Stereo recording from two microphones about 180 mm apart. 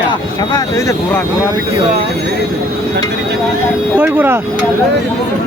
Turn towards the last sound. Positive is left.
turn(degrees=-10)  # may be behind; listen again after turning